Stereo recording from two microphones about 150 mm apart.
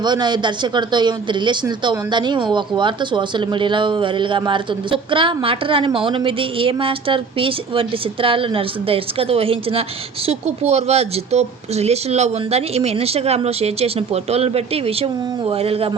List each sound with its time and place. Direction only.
0.0 s speech: 30° right (ahead or behind)